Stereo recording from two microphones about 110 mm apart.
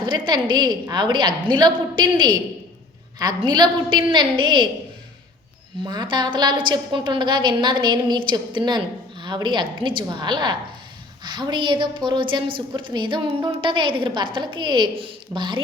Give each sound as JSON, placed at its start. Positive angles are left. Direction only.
{"t": 0.0, "sound": "a woman's voice", "side_deg": -45}
{"t": 5.8, "sound": "a woman's voice", "side_deg": -40}